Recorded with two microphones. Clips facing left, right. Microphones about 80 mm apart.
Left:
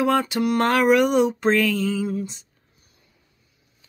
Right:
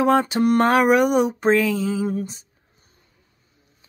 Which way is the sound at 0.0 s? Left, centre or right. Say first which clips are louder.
Right 3 dB; right.